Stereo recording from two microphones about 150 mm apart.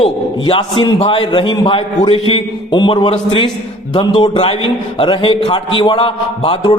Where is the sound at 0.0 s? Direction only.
35° left (ahead or behind).